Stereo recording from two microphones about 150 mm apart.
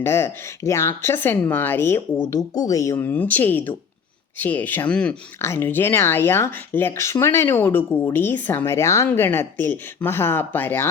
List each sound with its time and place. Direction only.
0.0 s speech: 15° left (ahead or behind)